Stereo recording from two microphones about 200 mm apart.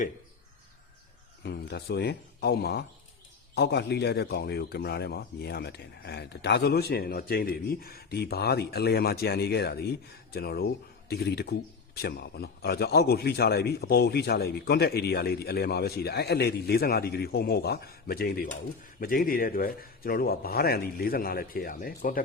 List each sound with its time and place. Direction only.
1.5 s speech: 55° left (ahead or behind)